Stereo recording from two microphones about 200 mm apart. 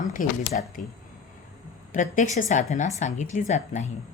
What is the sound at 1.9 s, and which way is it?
A woman's voice, 40° left (ahead or behind).